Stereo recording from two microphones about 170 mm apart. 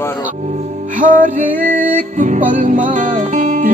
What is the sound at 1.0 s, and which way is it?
Music, 50° right (ahead or behind).